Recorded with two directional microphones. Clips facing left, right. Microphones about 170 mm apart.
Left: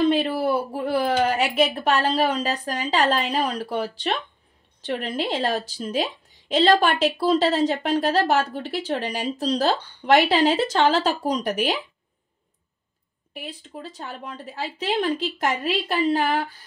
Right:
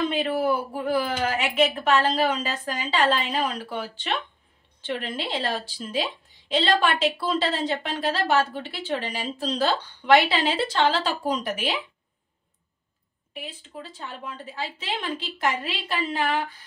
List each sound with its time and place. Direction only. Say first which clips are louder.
0.0 s a woman's voice: left 3 dB; 35° left (ahead or behind)
13.3 s a woman's voice: left 2 dB; 40° left (ahead or behind)